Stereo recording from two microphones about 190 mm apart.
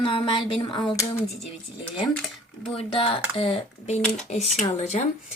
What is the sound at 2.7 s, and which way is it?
A woman's voice, 30° left (ahead or behind).